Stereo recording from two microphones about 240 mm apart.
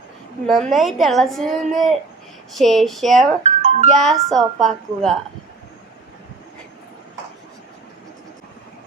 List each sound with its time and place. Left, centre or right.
0.4 s a woman's voice: centre
3.4 s music: right
3.9 s a woman's voice: centre